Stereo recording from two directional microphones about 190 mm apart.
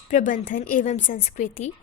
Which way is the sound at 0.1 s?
40° left (ahead or behind).